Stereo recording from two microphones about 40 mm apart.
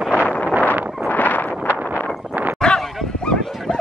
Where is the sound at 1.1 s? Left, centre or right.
Left.